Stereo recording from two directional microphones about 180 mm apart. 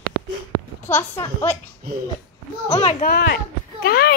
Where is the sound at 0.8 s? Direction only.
10° left (ahead or behind).